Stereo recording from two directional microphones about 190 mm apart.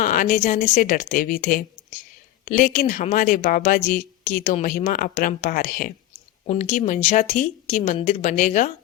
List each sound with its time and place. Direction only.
0.0 s a woman's voice: 45° left (ahead or behind)